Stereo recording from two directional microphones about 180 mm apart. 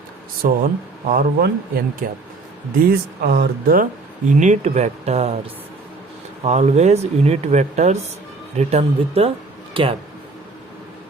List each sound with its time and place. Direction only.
0.4 s speech: 55° right (ahead or behind)
4.3 s speech: 45° right (ahead or behind)
6.4 s speech: 40° right (ahead or behind)